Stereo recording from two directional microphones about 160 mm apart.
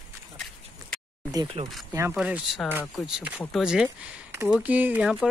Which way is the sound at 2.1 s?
5° right (ahead or behind).